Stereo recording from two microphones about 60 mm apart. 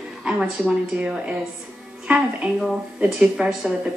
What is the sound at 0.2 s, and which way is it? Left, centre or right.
A woman's voice, centre.